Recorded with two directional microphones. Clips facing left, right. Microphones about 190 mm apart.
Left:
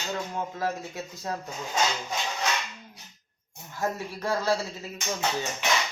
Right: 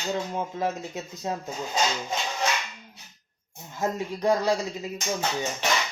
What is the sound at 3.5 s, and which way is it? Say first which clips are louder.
Speech: right 2 dB; 20° right (ahead or behind).